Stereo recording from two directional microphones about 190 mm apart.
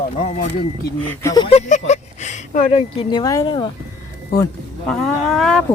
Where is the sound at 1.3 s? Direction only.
25° left (ahead or behind).